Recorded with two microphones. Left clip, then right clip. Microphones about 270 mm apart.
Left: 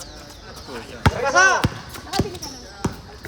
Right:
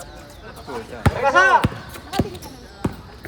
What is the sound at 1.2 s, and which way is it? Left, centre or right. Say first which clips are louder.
Speech: right 2 dB; right.